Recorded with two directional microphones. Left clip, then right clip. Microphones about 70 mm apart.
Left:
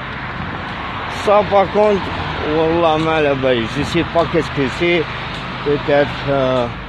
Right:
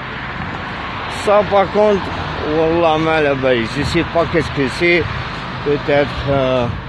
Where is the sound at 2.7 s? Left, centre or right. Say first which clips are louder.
Right 1 dB; right.